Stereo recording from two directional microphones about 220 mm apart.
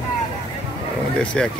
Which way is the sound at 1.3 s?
5° left (ahead or behind).